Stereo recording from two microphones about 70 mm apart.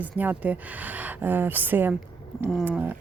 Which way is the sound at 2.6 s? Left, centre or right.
Right.